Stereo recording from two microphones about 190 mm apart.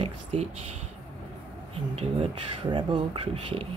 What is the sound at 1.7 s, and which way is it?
Speech, 30° right (ahead or behind).